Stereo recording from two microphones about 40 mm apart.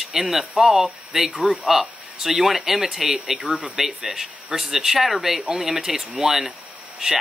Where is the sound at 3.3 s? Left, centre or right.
Right.